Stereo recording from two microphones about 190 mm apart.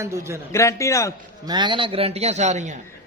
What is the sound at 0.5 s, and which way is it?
Speech, 15° left (ahead or behind).